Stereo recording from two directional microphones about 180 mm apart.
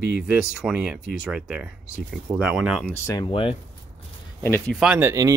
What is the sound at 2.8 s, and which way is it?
Speech, 15° left (ahead or behind).